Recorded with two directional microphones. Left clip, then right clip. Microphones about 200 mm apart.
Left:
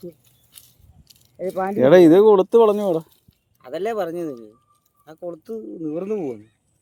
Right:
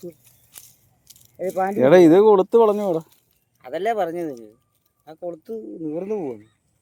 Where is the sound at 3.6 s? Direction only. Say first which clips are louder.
Right 2 dB; 20° left (ahead or behind).